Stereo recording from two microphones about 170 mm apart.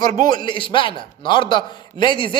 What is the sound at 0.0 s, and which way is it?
A man's voice, 25° left (ahead or behind).